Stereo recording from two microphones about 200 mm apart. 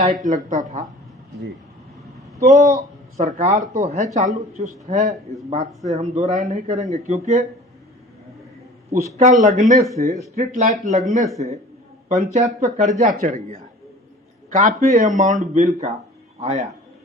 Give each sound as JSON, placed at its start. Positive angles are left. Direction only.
{"t": 0.0, "sound": "speech", "side_deg": -40}
{"t": 2.4, "sound": "speech", "side_deg": -35}
{"t": 9.1, "sound": "speech", "side_deg": -40}